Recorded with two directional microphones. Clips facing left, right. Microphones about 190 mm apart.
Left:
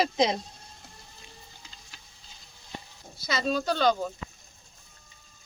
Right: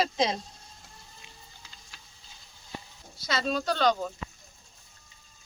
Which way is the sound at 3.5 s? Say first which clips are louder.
Left 1 dB; 5° left (ahead or behind).